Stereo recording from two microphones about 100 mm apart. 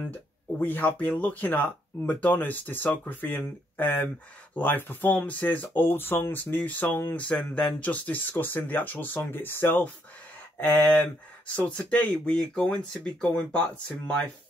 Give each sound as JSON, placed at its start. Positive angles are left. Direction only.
{"t": 0.1, "sound": "speech", "side_deg": 15}